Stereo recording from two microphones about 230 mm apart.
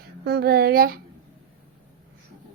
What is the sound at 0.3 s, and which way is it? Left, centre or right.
Speech, right.